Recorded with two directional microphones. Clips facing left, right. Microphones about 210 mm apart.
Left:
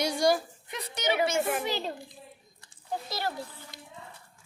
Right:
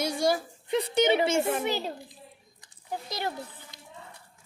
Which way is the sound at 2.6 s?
15° right (ahead or behind).